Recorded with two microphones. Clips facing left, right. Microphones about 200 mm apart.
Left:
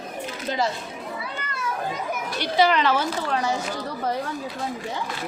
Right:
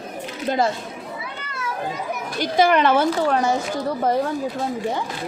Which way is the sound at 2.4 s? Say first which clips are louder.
Right 3 dB; 50° right (ahead or behind).